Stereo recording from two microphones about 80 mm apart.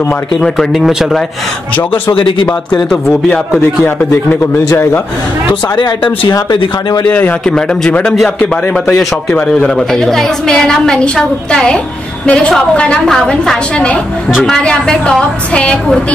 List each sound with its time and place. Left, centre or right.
0.4 s speech: centre
2.1 s speech: left
5.5 s speech: left
7.1 s a man's voice: centre
7.4 s a woman's voice: centre
9.8 s a woman's voice: centre